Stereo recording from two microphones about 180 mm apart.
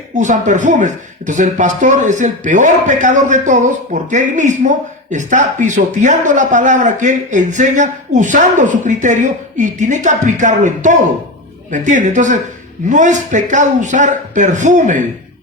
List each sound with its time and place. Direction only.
0.2 s a man's voice: 45° right (ahead or behind)